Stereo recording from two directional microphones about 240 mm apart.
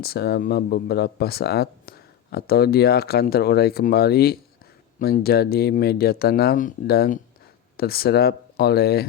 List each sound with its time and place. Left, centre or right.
0.0 s speech: left